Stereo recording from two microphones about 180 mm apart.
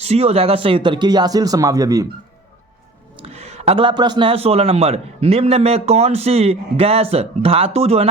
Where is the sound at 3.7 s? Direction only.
30° right (ahead or behind).